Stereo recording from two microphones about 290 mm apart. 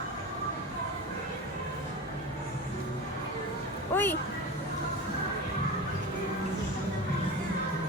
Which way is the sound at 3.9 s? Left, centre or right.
Centre.